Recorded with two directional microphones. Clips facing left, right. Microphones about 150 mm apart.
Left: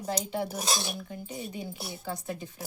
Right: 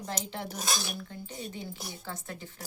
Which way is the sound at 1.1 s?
10° left (ahead or behind).